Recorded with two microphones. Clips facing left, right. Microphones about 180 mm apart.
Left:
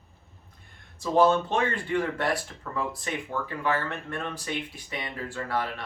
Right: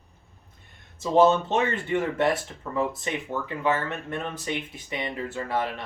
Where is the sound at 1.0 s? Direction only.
20° right (ahead or behind).